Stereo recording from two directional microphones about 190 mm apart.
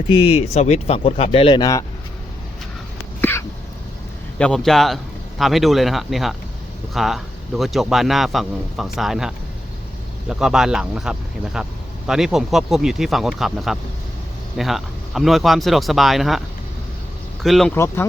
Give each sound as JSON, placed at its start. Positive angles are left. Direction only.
{"t": 0.1, "sound": "speech", "side_deg": 30}
{"t": 3.2, "sound": "a sound", "side_deg": 10}
{"t": 4.4, "sound": "a man's voice", "side_deg": 5}
{"t": 17.4, "sound": "a man's voice", "side_deg": 0}
{"t": 17.7, "sound": "speech", "side_deg": 15}